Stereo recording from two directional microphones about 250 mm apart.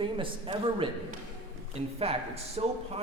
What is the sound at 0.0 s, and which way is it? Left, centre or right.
Speech, right.